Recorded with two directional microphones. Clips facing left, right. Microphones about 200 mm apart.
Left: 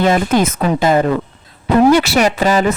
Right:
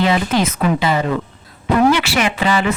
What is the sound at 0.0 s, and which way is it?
A woman's voice, 45° left (ahead or behind).